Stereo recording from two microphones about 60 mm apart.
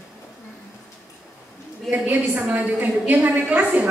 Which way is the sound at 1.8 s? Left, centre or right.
Right.